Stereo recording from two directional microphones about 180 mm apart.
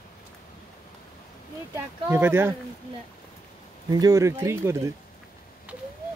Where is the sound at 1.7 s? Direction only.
10° right (ahead or behind).